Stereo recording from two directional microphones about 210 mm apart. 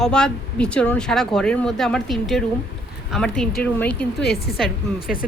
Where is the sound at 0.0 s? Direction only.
5° left (ahead or behind).